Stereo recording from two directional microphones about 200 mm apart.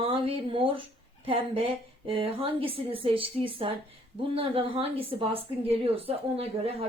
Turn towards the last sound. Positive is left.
turn(degrees=-30)  # may be behind; listen again after turning